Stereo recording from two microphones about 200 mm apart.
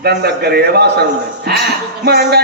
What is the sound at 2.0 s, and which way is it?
Speech, 55° right (ahead or behind).